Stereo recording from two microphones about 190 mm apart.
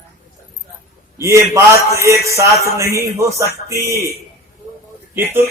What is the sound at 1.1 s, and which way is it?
A man's voice, 15° right (ahead or behind).